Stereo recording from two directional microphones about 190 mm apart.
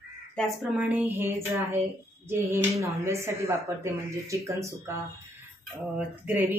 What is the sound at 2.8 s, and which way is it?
Speech, 15° right (ahead or behind).